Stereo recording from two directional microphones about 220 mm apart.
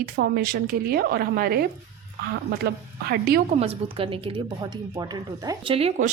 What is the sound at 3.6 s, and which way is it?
A woman's voice, 25° right (ahead or behind).